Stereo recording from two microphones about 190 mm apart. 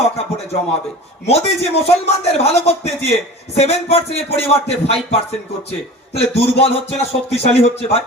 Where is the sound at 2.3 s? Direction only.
35° left (ahead or behind).